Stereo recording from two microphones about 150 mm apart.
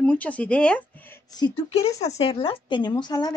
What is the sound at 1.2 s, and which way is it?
Speech, 25° left (ahead or behind).